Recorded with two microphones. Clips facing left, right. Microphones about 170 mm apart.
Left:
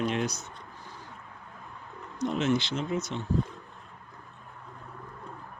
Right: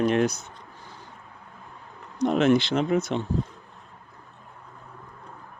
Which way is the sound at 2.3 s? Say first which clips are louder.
Right 7 dB; 60° right (ahead or behind).